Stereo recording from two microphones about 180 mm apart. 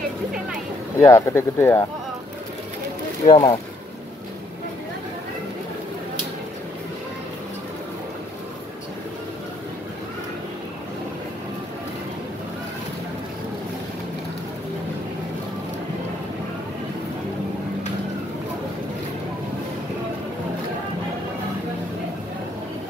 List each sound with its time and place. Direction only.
0.9 s speech: 15° left (ahead or behind)
3.3 s speech: 20° left (ahead or behind)